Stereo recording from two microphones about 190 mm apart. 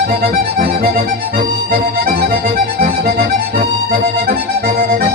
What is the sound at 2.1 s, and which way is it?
Music, 50° right (ahead or behind).